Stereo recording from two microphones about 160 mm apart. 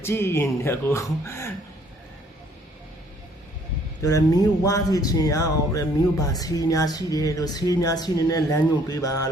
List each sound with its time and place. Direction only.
0.0 s speech: 15° left (ahead or behind)
4.0 s speech: 20° left (ahead or behind)